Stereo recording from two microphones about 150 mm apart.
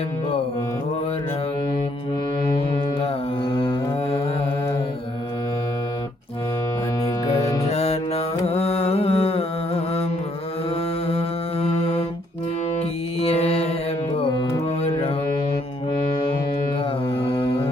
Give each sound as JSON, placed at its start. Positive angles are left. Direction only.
{"t": 3.5, "sound": "mantra", "side_deg": 40}
{"t": 7.6, "sound": "music", "side_deg": 45}
{"t": 11.6, "sound": "mantra", "side_deg": 40}
{"t": 13.1, "sound": "mantra", "side_deg": 40}
{"t": 17.2, "sound": "mantra", "side_deg": 40}